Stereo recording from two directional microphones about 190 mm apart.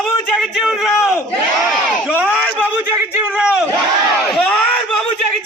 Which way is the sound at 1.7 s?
5° right (ahead or behind).